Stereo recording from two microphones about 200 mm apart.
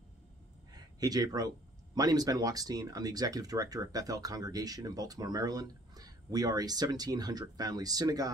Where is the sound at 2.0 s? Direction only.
20° right (ahead or behind).